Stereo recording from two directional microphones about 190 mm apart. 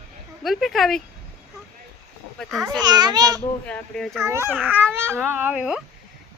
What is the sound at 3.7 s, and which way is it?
Speech, 5° left (ahead or behind).